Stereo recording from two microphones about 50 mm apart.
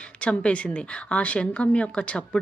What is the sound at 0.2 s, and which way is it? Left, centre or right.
A woman's voice, left.